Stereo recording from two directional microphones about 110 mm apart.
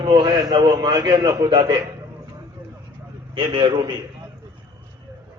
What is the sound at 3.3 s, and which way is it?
Speech, 50° right (ahead or behind).